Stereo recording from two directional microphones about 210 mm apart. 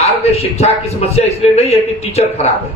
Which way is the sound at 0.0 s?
30° left (ahead or behind).